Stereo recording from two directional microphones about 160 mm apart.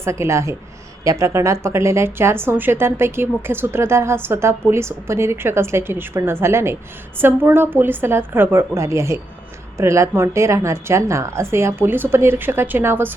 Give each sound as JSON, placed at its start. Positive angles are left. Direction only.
{"t": 0.0, "sound": "speech", "side_deg": -15}